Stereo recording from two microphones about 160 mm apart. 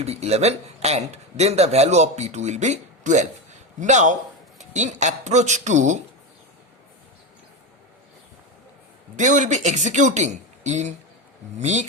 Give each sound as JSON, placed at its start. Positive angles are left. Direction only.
{"t": 0.0, "sound": "a man's voice", "side_deg": -40}
{"t": 9.1, "sound": "a man's voice", "side_deg": -50}